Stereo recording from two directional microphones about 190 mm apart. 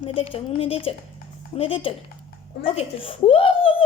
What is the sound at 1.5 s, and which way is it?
Speech, 30° left (ahead or behind).